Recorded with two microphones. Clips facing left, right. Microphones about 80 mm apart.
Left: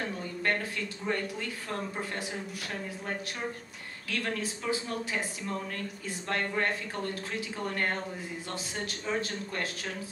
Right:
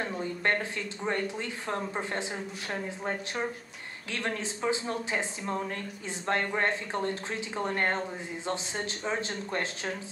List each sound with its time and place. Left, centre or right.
0.4 s speech: right
9.0 s speech: right